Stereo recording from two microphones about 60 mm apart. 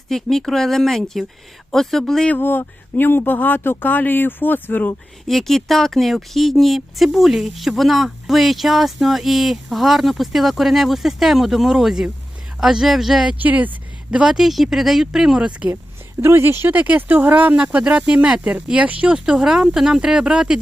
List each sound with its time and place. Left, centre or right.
0.1 s speech: centre
2.4 s speech: left
5.3 s speech: centre
13.4 s speech: right
14.1 s speech: centre
16.2 s speech: right
16.7 s speech: right